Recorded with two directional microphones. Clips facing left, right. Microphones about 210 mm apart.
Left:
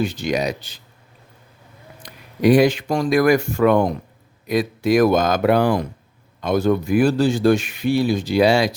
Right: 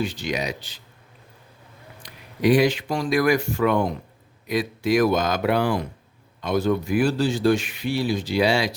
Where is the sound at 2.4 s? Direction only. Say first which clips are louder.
Left 4 dB; 45° left (ahead or behind).